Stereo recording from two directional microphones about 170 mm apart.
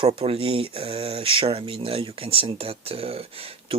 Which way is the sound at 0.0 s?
35° right (ahead or behind).